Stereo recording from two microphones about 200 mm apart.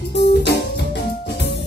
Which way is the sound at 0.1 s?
60° left (ahead or behind).